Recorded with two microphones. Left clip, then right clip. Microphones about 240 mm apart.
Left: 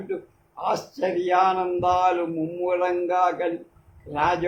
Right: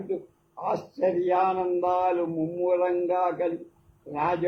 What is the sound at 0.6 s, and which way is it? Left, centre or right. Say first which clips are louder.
A man's voice: left 1 dB; left.